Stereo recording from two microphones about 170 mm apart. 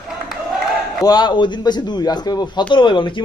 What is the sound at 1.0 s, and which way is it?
A man's voice, 25° left (ahead or behind).